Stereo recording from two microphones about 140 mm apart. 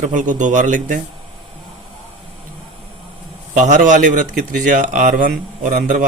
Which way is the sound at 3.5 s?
65° right (ahead or behind).